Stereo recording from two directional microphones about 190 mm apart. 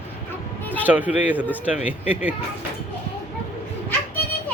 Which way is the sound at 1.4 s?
10° left (ahead or behind).